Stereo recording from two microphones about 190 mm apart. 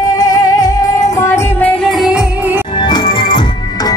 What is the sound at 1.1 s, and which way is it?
Music, 15° left (ahead or behind).